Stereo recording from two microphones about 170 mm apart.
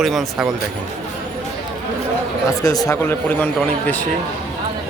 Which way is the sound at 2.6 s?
20° left (ahead or behind).